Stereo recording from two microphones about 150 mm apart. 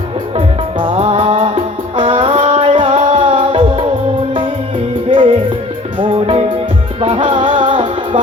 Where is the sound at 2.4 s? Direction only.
50° right (ahead or behind).